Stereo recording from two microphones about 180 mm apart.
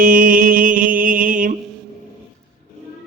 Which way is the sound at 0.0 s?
50° right (ahead or behind).